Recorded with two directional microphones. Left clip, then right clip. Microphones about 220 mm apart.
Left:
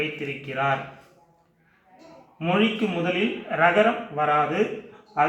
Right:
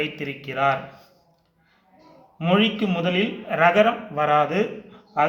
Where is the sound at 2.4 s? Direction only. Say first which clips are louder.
Right 2 dB; 55° right (ahead or behind).